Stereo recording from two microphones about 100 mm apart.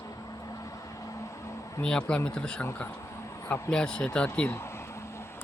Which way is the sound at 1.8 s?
10° left (ahead or behind).